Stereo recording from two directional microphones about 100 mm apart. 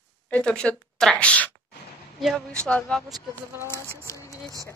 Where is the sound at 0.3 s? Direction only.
10° left (ahead or behind).